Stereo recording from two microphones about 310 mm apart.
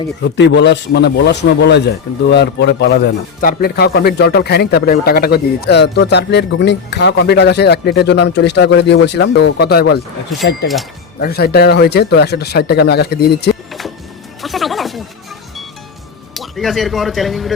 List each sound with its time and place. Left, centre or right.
0.2 s speech: left
14.4 s music: centre
16.3 s speech: centre